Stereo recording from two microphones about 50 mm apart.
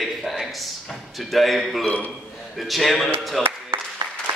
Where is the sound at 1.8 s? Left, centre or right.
Left.